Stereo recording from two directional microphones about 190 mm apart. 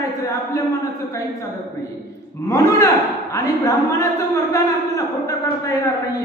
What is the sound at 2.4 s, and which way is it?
A man's voice, 15° left (ahead or behind).